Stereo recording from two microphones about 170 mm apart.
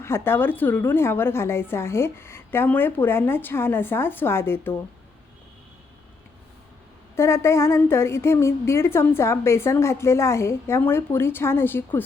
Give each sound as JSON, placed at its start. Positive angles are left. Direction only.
{"t": 0.0, "sound": "a woman's voice", "side_deg": 15}
{"t": 7.2, "sound": "a woman's voice", "side_deg": 15}